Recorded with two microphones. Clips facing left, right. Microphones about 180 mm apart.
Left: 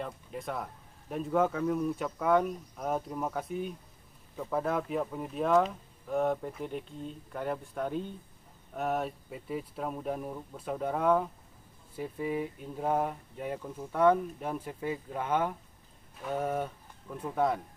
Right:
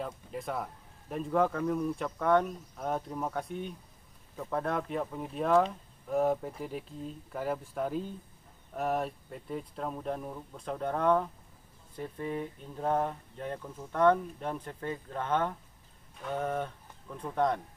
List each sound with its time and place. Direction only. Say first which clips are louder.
0.0 s speech: right 1 dB; centre (ahead or behind)